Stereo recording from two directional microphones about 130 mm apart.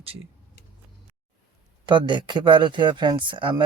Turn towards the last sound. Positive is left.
turn(degrees=-40)  # may be behind; listen again after turning